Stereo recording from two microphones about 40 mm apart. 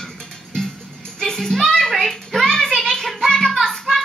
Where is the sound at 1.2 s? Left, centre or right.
Centre.